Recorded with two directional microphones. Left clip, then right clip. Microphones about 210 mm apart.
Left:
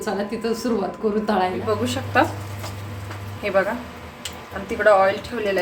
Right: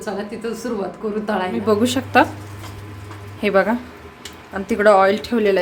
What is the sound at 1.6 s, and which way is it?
Speech, 50° right (ahead or behind).